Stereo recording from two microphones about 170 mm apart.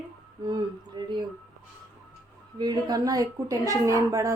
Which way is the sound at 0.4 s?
25° right (ahead or behind).